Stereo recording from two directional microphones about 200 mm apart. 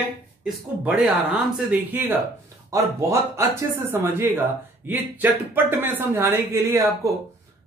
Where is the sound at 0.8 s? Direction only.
5° right (ahead or behind).